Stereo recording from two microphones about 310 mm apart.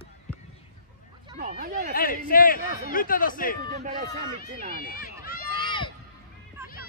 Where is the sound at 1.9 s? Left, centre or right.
Left.